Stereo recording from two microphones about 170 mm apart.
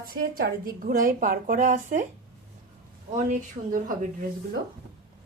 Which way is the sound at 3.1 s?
50° right (ahead or behind).